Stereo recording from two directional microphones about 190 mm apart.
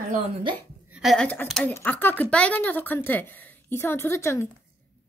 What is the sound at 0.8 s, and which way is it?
Speech, 5° right (ahead or behind).